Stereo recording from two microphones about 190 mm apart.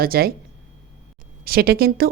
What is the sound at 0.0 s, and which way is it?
Speech, 50° right (ahead or behind).